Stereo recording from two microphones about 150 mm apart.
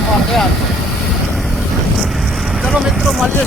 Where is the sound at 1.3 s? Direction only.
Centre (ahead or behind).